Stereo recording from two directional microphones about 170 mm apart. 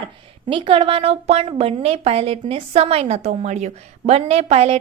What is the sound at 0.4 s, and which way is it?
A woman's voice, 30° right (ahead or behind).